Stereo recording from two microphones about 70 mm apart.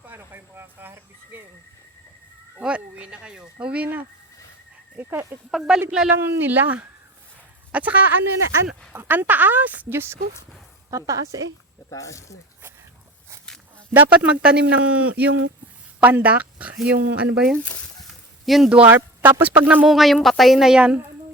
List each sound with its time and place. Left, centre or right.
0.0 s a sound: right
2.6 s speech: centre
4.9 s speech: right
5.5 s speech: centre
6.1 s speech: right
10.9 s a woman's voice: right
11.9 s speech: left
13.9 s speech: centre
17.6 s speech: centre
18.4 s speech: centre
18.9 s speech: right
19.8 s speech: centre